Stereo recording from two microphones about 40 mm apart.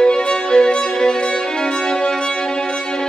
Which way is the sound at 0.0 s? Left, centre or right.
Left.